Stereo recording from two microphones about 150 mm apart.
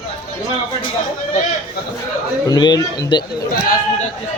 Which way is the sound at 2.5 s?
25° left (ahead or behind).